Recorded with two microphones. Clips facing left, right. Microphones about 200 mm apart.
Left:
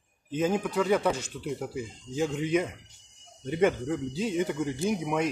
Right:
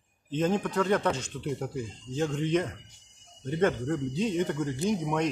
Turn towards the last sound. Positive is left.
turn(degrees=10)  # may be behind; listen again after turning